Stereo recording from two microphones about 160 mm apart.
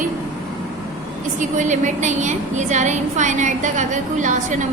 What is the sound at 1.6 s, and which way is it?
A woman's voice, 50° right (ahead or behind).